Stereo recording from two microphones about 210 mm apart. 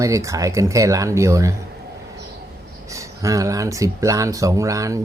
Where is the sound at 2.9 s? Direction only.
15° right (ahead or behind).